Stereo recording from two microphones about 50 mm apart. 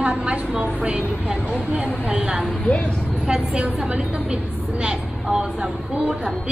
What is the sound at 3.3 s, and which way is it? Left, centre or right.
A woman's voice, right.